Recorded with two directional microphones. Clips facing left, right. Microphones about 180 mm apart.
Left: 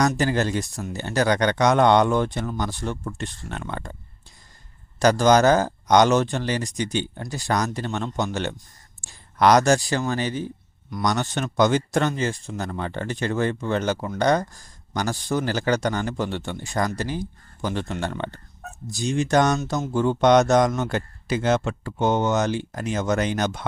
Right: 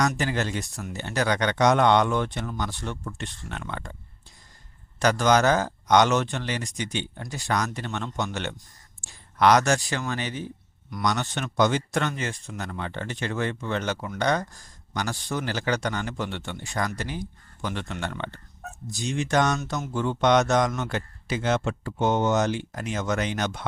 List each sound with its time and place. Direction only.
0.2 s speech: 40° left (ahead or behind)
4.9 s speech: 35° left (ahead or behind)